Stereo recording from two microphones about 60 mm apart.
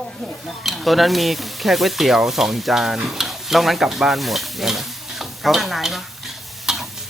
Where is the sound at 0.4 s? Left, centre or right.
Centre.